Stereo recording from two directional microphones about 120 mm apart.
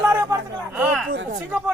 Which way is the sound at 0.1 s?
25° right (ahead or behind).